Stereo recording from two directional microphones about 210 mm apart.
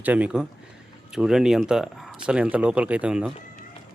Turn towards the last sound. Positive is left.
turn(degrees=-5)  # may be behind; listen again after turning